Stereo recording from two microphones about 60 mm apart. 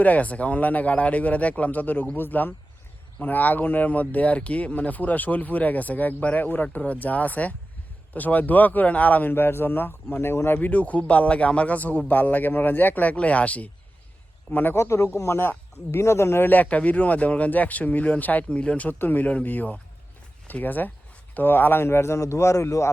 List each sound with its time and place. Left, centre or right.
0.0 s speech: left
9.3 s speech: left
10.6 s speech: left
14.8 s speech: left
16.5 s speech: left
18.9 s speech: left